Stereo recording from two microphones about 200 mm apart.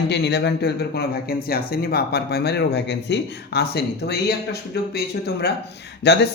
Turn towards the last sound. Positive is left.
turn(degrees=60)  # may be behind; listen again after turning